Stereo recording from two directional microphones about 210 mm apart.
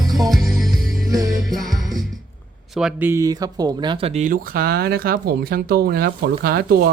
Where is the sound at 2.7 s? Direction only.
5° right (ahead or behind).